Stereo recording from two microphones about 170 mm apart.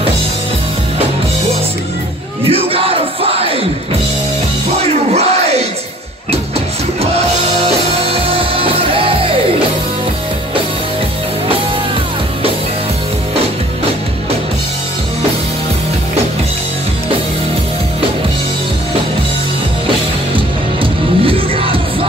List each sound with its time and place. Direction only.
2.4 s music: 35° right (ahead or behind)
4.8 s music: 40° right (ahead or behind)
8.0 s music: 35° right (ahead or behind)
20.3 s music: 30° right (ahead or behind)